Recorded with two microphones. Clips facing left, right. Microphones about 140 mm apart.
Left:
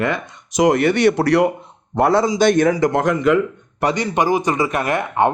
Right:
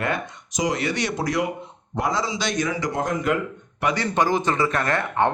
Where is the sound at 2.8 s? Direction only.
70° left (ahead or behind).